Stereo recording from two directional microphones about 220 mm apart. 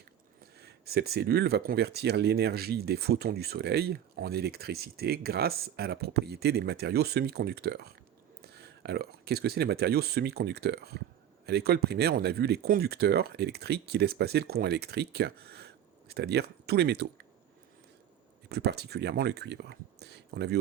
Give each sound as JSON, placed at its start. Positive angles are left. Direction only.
{"t": 0.6, "sound": "speech", "side_deg": -45}
{"t": 18.4, "sound": "speech", "side_deg": -45}